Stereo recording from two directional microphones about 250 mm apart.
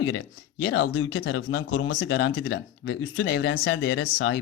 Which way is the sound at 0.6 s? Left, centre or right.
Left.